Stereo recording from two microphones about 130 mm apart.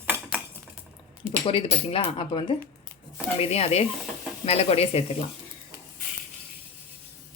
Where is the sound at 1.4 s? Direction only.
45° left (ahead or behind).